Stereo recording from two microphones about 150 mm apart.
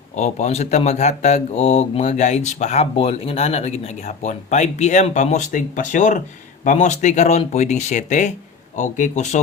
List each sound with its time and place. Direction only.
0.2 s speech: 45° left (ahead or behind)